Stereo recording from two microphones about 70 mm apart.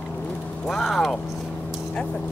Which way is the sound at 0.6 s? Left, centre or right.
Centre.